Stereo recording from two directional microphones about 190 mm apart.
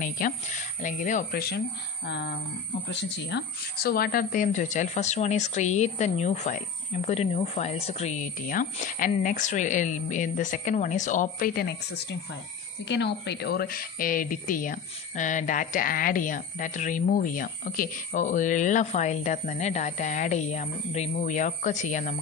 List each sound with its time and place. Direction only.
0.0 s speech: 40° left (ahead or behind)
2.9 s speech: 65° left (ahead or behind); by 22.1 s 40° left (ahead or behind)